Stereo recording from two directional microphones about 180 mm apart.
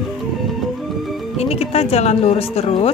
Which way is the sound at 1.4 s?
35° left (ahead or behind).